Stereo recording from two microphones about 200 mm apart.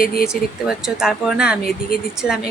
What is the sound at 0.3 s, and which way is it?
Speech, 5° right (ahead or behind).